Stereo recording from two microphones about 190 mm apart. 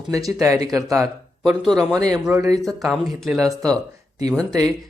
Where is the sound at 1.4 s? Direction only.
Centre (ahead or behind).